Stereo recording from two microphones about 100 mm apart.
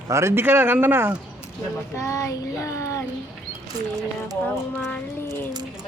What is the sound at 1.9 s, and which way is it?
Child singing, 30° left (ahead or behind).